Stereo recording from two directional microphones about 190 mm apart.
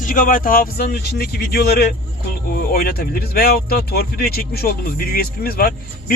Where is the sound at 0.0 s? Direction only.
45° left (ahead or behind).